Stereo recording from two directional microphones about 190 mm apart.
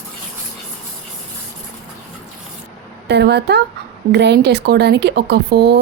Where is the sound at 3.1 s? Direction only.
60° right (ahead or behind).